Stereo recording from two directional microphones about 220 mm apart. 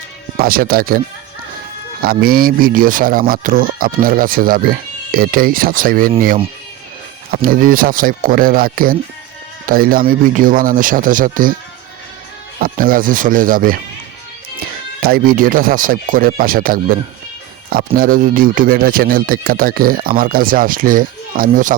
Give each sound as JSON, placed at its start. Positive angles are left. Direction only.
{"t": 0.3, "sound": "speech", "side_deg": -40}
{"t": 12.5, "sound": "speech", "side_deg": -40}